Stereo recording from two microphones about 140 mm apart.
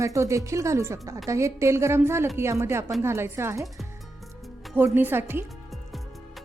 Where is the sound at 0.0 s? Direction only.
20° right (ahead or behind).